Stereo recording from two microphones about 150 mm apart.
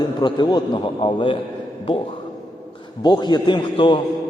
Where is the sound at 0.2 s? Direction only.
30° left (ahead or behind).